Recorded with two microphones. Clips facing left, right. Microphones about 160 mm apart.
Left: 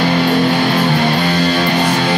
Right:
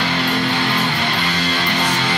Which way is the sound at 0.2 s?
45° left (ahead or behind).